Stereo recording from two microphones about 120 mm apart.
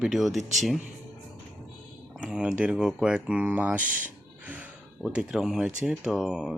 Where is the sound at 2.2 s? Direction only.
5° right (ahead or behind).